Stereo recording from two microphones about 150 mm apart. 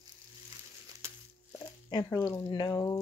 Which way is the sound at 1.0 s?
20° right (ahead or behind).